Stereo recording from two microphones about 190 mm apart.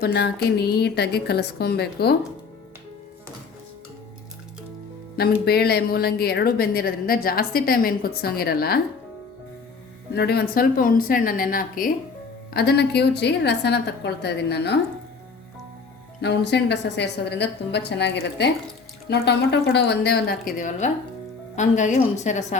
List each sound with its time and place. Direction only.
0.0 s a woman's voice: 55° left (ahead or behind)
5.5 s a woman's voice: 55° left (ahead or behind)
10.2 s a woman's voice: 55° left (ahead or behind)
16.2 s a woman's voice: 60° left (ahead or behind)
20.6 s a woman's voice: 40° left (ahead or behind)